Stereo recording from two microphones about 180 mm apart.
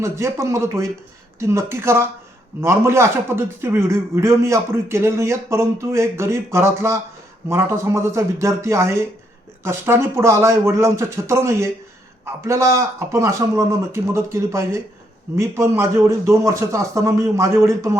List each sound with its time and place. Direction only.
0.0 s a man's voice: 15° right (ahead or behind)